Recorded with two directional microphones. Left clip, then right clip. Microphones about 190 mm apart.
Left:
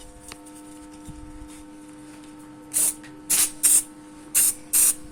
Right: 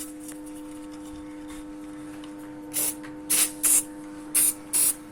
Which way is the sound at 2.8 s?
30° left (ahead or behind).